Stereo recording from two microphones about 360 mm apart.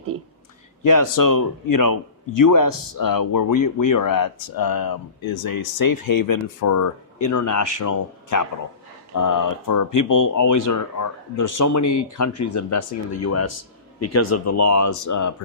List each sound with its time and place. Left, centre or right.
0.9 s a man's voice: left